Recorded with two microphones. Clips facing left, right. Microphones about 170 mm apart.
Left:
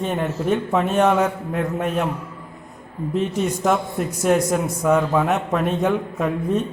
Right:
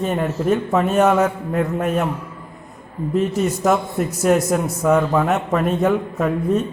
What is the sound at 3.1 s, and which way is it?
A man's voice, 5° right (ahead or behind).